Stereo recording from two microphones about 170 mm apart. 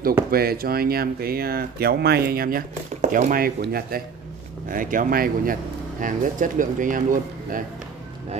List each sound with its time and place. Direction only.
0.3 s speech: 65° right (ahead or behind)
3.0 s speech: 50° right (ahead or behind)